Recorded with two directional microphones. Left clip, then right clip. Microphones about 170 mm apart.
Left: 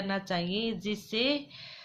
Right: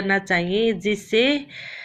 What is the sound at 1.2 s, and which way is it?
Speech, 55° left (ahead or behind).